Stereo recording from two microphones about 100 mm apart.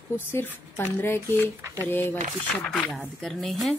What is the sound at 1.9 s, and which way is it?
Speech, 20° left (ahead or behind).